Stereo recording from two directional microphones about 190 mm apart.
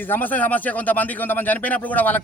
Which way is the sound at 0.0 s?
10° left (ahead or behind).